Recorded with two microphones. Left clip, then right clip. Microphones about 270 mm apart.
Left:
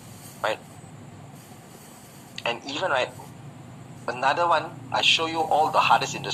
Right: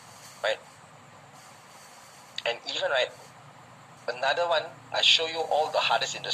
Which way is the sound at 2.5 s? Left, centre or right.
Left.